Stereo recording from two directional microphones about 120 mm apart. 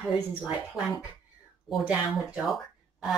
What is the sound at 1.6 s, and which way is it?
Speech, 5° right (ahead or behind).